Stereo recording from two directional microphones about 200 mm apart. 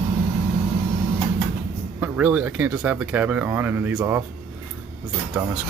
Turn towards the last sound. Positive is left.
turn(degrees=-10)  # may be behind; listen again after turning